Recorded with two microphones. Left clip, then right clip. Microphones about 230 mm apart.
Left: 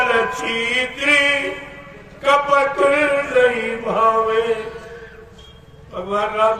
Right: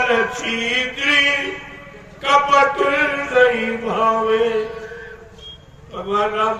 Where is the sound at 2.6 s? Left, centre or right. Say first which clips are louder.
Even; left.